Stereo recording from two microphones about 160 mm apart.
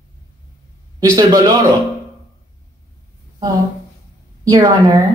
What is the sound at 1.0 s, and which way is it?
Speech, 20° right (ahead or behind).